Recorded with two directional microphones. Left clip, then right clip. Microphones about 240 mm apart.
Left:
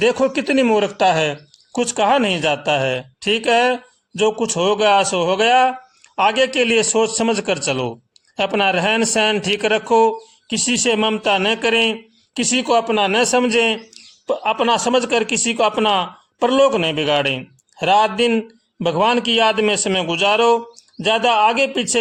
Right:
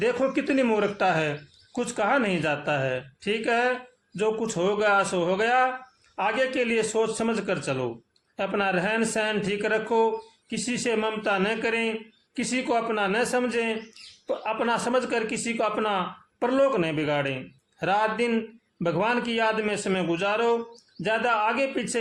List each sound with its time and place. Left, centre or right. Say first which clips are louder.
0.0 s a man's voice: left 8 dB; left